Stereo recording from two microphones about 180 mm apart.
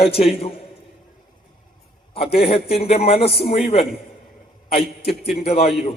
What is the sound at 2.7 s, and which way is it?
Speech, 35° left (ahead or behind).